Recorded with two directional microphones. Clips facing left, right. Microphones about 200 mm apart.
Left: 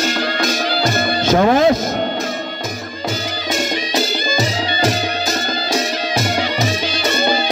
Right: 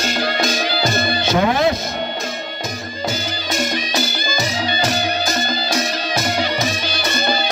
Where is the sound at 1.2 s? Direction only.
45° left (ahead or behind).